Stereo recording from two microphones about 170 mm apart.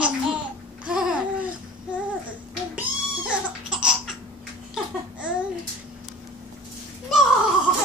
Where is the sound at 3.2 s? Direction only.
5° right (ahead or behind).